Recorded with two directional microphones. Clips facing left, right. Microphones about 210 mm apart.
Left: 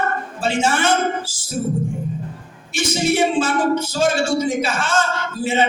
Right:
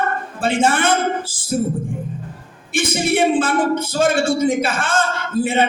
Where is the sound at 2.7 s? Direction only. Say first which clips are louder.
Right 1 dB; 55° right (ahead or behind).